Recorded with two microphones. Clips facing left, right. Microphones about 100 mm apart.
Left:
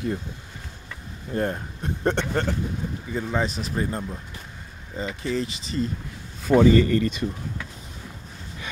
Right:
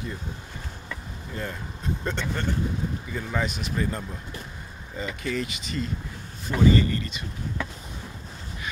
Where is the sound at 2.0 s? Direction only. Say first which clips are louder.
Left 7 dB; 70° left (ahead or behind).